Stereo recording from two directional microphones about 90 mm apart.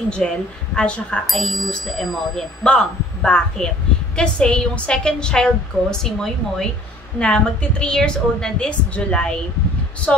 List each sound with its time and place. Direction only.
0.2 s a woman's voice: 10° left (ahead or behind)
1.2 s a woman's voice: centre (ahead or behind)